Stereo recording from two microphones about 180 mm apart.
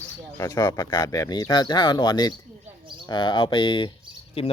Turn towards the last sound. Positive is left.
turn(degrees=35)  # may be behind; listen again after turning